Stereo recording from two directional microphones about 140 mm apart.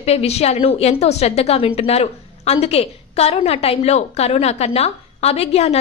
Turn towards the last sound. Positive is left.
turn(degrees=50)  # may be behind; listen again after turning